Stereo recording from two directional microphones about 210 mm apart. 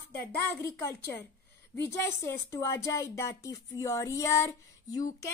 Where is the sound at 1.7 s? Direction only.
10° left (ahead or behind).